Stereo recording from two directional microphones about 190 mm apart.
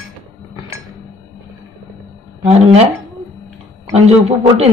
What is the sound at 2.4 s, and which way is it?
Speech, 35° right (ahead or behind).